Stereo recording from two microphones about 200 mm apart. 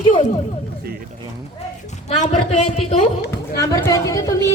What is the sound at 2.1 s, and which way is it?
Speech, 35° left (ahead or behind).